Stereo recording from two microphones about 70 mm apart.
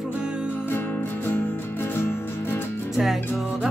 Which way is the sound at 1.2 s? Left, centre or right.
Left.